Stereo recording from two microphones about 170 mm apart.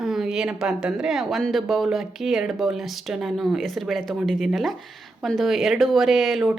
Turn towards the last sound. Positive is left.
turn(degrees=0)  # may be behind; listen again after turning